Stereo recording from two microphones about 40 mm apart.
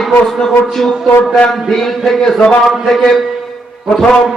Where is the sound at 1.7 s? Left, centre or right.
Centre.